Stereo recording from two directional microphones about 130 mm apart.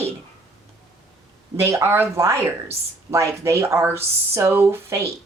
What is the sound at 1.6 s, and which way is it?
Speech, 20° right (ahead or behind).